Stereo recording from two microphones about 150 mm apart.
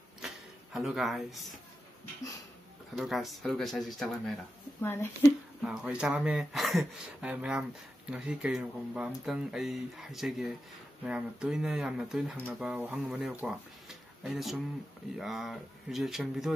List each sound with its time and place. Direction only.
0.7 s speech: centre (ahead or behind)
3.0 s speech: centre (ahead or behind)
4.8 s speech: 15° left (ahead or behind)
5.6 s speech: 5° right (ahead or behind)